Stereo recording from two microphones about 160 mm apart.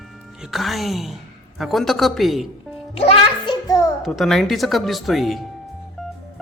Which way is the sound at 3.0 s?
35° left (ahead or behind).